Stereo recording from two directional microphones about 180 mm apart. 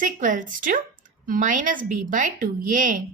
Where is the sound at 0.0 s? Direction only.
45° right (ahead or behind).